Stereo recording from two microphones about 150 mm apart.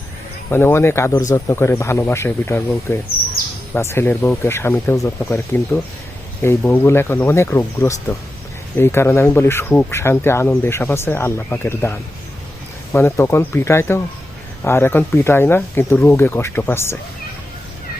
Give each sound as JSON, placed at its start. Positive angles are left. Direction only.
{"t": 0.5, "sound": "speech", "side_deg": 15}